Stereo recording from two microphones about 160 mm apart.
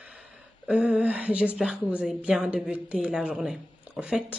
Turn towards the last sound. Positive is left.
turn(degrees=-5)  # may be behind; listen again after turning